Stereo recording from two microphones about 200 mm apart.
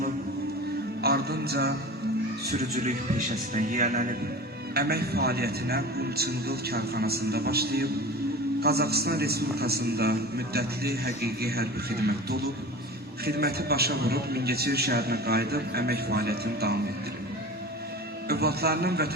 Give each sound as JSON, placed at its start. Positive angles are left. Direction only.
{"t": 1.0, "sound": "music", "side_deg": -50}
{"t": 2.5, "sound": "a man's voice", "side_deg": -45}
{"t": 18.3, "sound": "a man's voice", "side_deg": -50}